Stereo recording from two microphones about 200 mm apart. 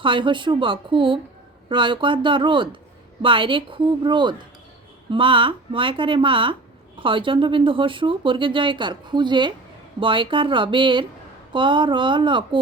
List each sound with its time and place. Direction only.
0.0 s speech: 25° right (ahead or behind)